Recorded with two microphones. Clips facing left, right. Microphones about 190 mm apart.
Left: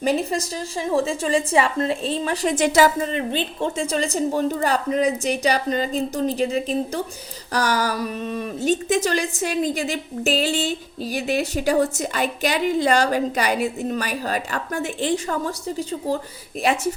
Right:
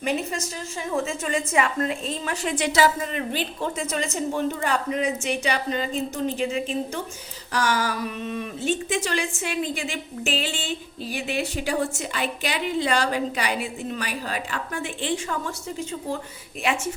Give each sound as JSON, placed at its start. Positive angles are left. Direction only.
{"t": 0.0, "sound": "a woman's voice", "side_deg": 35}
{"t": 3.1, "sound": "a woman's voice", "side_deg": 25}